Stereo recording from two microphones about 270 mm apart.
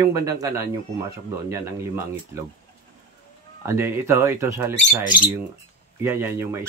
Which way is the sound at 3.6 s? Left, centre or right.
Centre.